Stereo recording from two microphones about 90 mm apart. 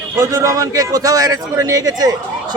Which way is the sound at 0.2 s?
40° right (ahead or behind).